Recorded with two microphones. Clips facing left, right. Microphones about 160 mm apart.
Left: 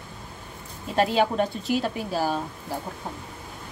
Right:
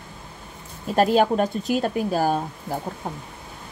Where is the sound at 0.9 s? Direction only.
45° right (ahead or behind).